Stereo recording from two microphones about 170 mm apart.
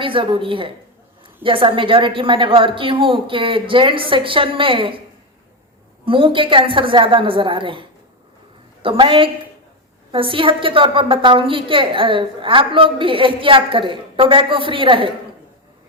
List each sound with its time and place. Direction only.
0.0 s a woman's voice: 30° right (ahead or behind)
6.1 s a woman's voice: 30° right (ahead or behind)